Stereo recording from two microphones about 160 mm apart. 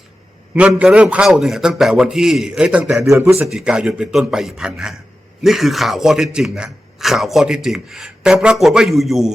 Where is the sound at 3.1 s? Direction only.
15° right (ahead or behind).